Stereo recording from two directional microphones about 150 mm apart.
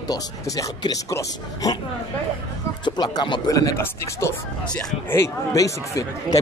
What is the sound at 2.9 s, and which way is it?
Speech, 30° left (ahead or behind).